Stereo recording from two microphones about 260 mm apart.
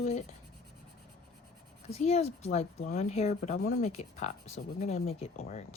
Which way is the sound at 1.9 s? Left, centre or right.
Left.